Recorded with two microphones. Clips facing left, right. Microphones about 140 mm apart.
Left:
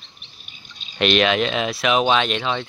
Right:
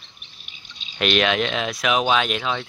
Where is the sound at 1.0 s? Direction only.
Centre (ahead or behind).